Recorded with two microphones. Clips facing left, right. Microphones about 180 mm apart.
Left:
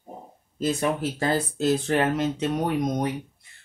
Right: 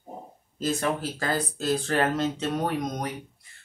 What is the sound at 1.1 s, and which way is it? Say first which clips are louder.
Speech: left 4 dB; 25° left (ahead or behind).